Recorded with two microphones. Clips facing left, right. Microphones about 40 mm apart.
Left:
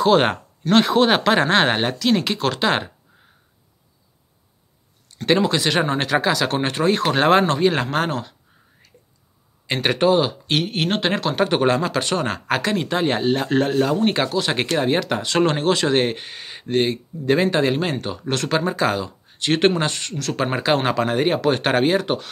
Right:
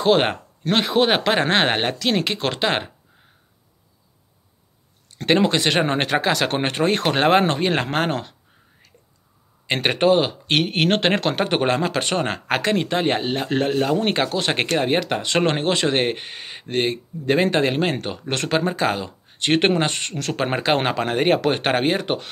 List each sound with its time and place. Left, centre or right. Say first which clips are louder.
0.0 s speech: left 1 dB; centre
5.0 s speech: even; right
7.2 s speech: left 1 dB; right
9.7 s speech: even; right
14.3 s speech: even; right